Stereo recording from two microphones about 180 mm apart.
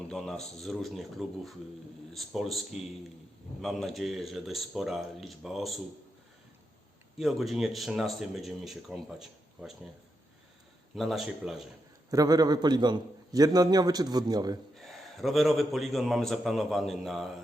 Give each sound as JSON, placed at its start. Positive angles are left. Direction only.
{"t": 0.1, "sound": "a man's voice", "side_deg": 0}
{"t": 7.2, "sound": "a man's voice", "side_deg": 0}
{"t": 10.9, "sound": "a man's voice", "side_deg": 0}
{"t": 12.1, "sound": "a man's voice", "side_deg": -20}
{"t": 14.8, "sound": "a man's voice", "side_deg": 0}